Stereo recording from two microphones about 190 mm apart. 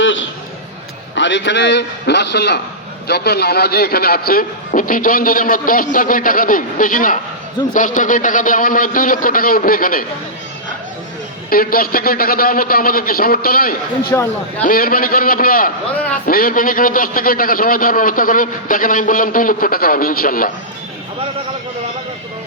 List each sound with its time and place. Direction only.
0.0 s a sound: 85° left
1.1 s a man's voice: 70° left (ahead or behind); by 10.1 s 50° left (ahead or behind)
11.4 s a man's voice: 50° left (ahead or behind)